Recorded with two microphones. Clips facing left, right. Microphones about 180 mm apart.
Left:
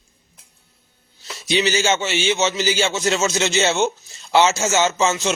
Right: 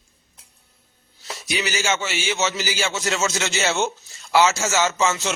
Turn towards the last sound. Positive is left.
turn(degrees=20)  # may be behind; listen again after turning